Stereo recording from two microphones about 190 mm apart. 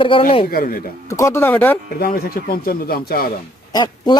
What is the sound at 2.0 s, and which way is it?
Speech, 50° left (ahead or behind).